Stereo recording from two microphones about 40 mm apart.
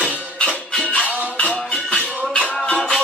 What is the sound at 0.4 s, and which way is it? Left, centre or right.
Music, centre.